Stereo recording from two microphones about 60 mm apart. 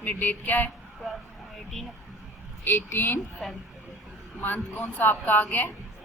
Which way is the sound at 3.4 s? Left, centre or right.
Centre.